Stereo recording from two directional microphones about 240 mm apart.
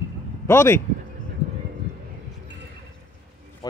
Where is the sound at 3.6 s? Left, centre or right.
Centre.